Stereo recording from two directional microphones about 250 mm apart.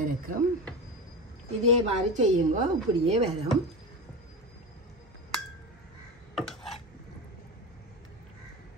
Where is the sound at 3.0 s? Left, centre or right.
Right.